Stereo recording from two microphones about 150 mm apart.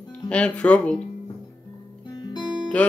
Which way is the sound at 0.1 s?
10° left (ahead or behind).